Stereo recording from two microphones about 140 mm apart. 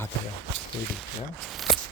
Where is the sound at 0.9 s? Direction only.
Centre (ahead or behind).